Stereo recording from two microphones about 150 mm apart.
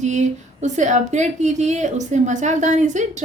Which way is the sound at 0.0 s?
50° right (ahead or behind).